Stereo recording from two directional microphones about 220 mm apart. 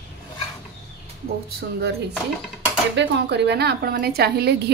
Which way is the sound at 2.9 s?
50° right (ahead or behind).